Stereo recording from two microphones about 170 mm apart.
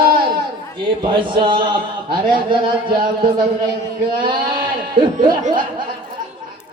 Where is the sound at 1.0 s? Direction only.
30° right (ahead or behind).